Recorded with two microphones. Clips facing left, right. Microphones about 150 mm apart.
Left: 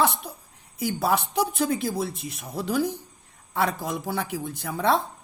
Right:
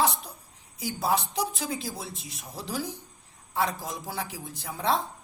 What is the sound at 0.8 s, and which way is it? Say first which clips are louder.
Speech: left 3 dB; 60° left (ahead or behind).